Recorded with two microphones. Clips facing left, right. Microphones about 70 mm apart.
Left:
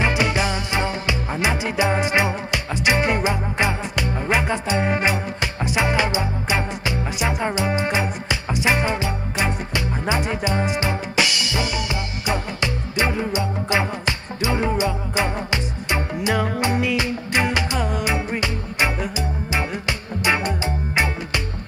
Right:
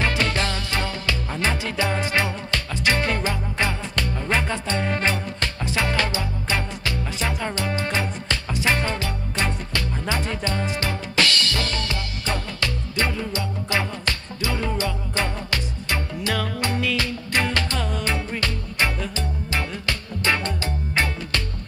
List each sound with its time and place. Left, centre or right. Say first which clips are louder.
0.0 s music: left 3 dB; centre